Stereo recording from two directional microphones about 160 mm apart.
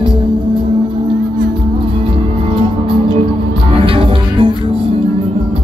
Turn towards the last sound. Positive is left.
turn(degrees=-35)  # may be behind; listen again after turning